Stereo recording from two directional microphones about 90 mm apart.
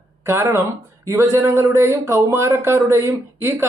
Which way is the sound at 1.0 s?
30° right (ahead or behind).